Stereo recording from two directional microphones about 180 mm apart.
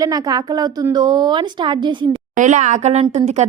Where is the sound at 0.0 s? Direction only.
20° right (ahead or behind).